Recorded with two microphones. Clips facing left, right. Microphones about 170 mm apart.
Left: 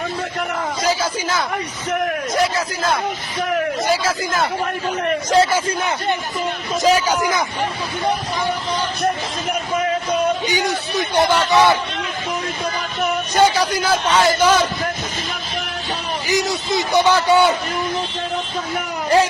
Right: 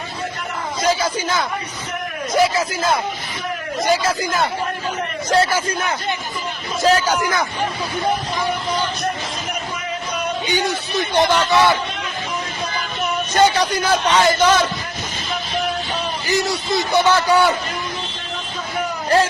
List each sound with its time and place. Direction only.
0.8 s a man's voice: 5° left (ahead or behind)
5.3 s a man's voice: 25° left (ahead or behind)
6.8 s a man's voice: 15° left (ahead or behind)
10.5 s a man's voice: 15° left (ahead or behind)
13.3 s a man's voice: 10° left (ahead or behind)
16.6 s a man's voice: 15° left (ahead or behind)